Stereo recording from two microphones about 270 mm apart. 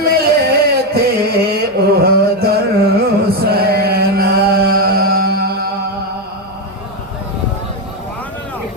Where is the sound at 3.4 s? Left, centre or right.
Right.